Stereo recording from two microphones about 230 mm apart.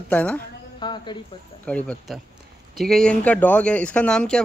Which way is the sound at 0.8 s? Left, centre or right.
Centre.